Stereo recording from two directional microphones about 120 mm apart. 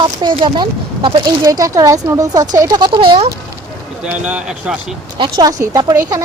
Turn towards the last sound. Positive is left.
turn(degrees=-30)  # may be behind; listen again after turning